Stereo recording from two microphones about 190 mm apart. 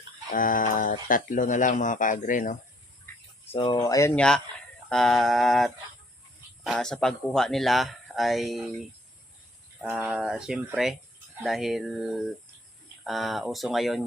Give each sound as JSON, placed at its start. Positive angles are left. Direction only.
{"t": 0.3, "sound": "speech", "side_deg": 45}
{"t": 3.5, "sound": "speech", "side_deg": 25}
{"t": 10.0, "sound": "speech", "side_deg": -5}